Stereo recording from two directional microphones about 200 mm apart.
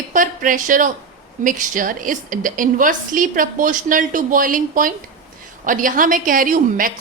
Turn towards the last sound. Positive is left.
turn(degrees=-45)  # may be behind; listen again after turning